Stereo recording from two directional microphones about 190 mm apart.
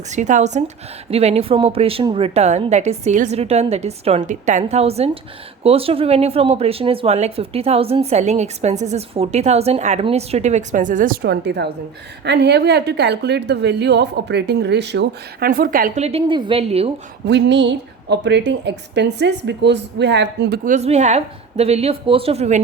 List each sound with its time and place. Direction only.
0.1 s a woman's voice: 40° right (ahead or behind)
16.0 s speech: 30° right (ahead or behind)
17.2 s a woman's voice: 65° right (ahead or behind)
20.7 s speech: 35° right (ahead or behind)